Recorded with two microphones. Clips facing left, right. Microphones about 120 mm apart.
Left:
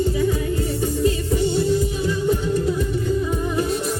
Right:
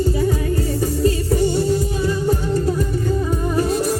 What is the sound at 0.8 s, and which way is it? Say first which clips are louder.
Music: right 1 dB; 40° right (ahead or behind).